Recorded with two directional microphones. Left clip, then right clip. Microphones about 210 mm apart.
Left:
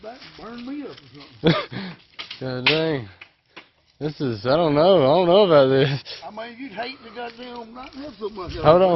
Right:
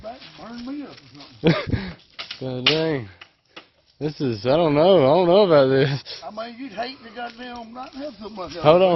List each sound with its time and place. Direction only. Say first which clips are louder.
1.4 s throat clearing: even; 15° right (ahead or behind)
2.4 s speech: even; 10° right (ahead or behind)
4.2 s speech: right 1 dB; 15° right (ahead or behind)
8.6 s speech: even; 10° right (ahead or behind)